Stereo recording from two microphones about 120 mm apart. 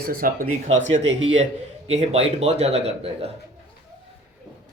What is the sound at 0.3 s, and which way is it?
A man's voice, 75° right (ahead or behind).